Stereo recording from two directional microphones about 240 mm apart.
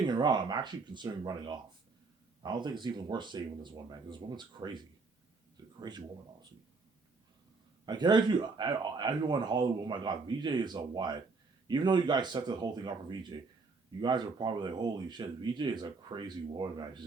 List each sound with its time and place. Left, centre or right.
0.0 s speech: centre
5.9 s speech: centre
7.9 s speech: centre